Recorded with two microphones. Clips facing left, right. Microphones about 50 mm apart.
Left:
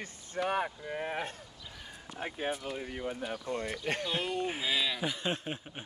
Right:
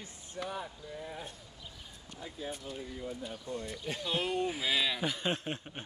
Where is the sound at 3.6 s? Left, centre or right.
Left.